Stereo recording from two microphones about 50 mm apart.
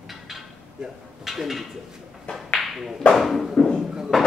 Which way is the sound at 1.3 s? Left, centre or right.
Centre.